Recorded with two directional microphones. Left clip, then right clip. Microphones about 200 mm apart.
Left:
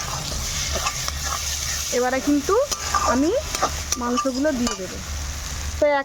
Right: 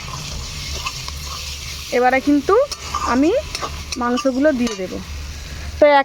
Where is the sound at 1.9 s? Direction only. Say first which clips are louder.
Right 7 dB; 15° right (ahead or behind).